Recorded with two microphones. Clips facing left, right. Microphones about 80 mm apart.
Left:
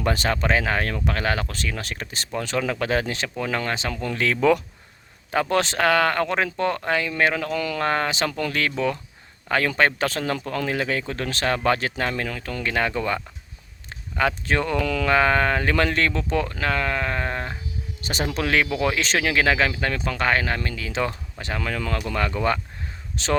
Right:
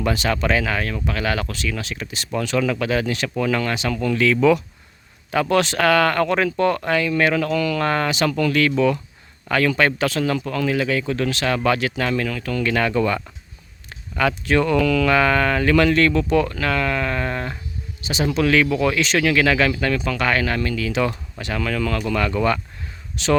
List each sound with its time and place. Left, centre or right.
0.0 s speech: left
5.3 s speech: left
18.0 s speech: left